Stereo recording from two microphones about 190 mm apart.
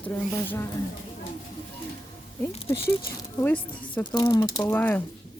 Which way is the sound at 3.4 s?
10° left (ahead or behind).